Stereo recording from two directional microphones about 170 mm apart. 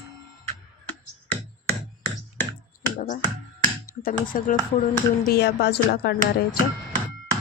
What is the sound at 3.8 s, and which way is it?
Speech, 55° left (ahead or behind).